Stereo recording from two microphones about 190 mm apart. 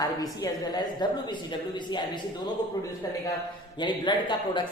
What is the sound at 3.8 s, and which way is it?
Speech, 20° left (ahead or behind).